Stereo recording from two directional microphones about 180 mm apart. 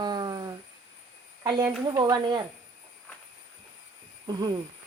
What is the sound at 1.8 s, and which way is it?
Speech, 25° right (ahead or behind).